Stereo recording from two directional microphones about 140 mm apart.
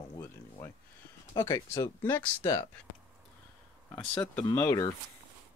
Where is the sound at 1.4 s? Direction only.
20° left (ahead or behind).